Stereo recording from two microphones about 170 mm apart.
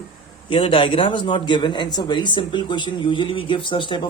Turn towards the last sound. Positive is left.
turn(degrees=30)  # may be behind; listen again after turning